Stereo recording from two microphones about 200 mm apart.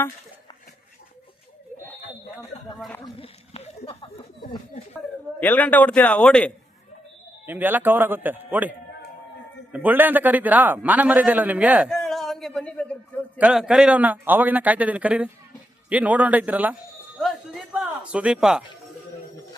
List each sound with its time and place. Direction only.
2.7 s speech: centre (ahead or behind)
3.2 s a sound: 30° left (ahead or behind)
5.4 s a man's voice: 10° left (ahead or behind)
7.4 s a man's voice: 10° right (ahead or behind)
9.7 s a man's voice: 10° right (ahead or behind); by 13.4 s 5° left (ahead or behind)
13.4 s a man's voice: 5° right (ahead or behind)
17.7 s speech: 5° right (ahead or behind)